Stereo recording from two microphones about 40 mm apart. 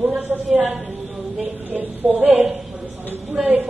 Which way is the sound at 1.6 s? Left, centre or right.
Right.